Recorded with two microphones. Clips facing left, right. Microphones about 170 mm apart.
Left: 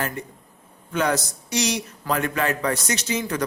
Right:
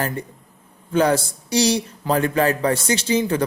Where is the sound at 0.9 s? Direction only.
30° right (ahead or behind).